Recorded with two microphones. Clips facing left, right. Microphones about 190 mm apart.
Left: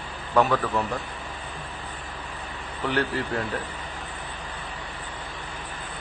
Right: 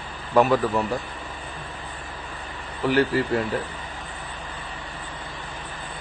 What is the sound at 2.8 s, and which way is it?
Speech, 5° right (ahead or behind).